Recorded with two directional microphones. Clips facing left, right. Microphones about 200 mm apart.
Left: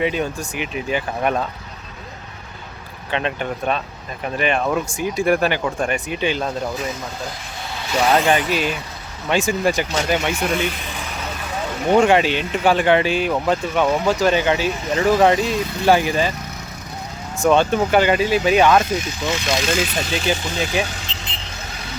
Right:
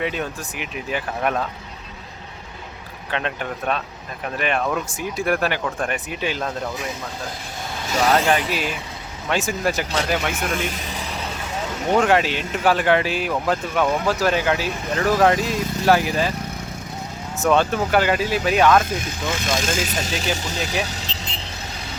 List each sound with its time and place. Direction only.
0.0 s speech: centre (ahead or behind)
3.1 s speech: centre (ahead or behind)
8.1 s speech: centre (ahead or behind)
10.7 s vehicle: 40° right (ahead or behind)
11.9 s speech: centre (ahead or behind)
15.5 s speech: 45° right (ahead or behind)
15.9 s speech: centre (ahead or behind)
17.3 s speech: 5° right (ahead or behind)
18.9 s speech: 55° right (ahead or behind)
20.8 s vehicle: 35° right (ahead or behind)